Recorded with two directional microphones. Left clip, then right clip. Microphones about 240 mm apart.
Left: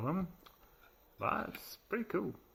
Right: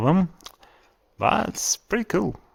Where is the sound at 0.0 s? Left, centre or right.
Right.